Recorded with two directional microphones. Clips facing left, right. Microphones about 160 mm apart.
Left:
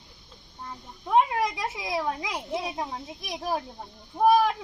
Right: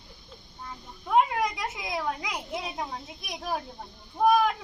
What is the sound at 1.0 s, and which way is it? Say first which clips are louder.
A child's voice: left 1 dB; 30° left (ahead or behind).